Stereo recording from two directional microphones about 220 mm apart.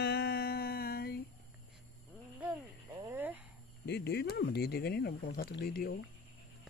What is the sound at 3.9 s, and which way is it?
Speech, 50° left (ahead or behind).